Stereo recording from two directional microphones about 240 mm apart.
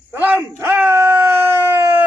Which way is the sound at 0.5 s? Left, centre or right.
Centre.